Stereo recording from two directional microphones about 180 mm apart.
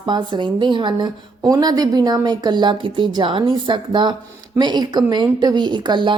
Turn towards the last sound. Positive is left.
turn(degrees=-25)  # may be behind; listen again after turning